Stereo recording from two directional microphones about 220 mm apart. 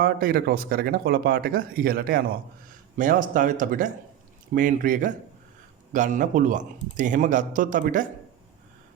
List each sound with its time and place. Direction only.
0.0 s speech: 40° right (ahead or behind)